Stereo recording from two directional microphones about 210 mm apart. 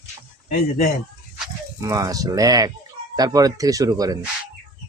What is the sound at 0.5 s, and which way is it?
Speech, 45° left (ahead or behind).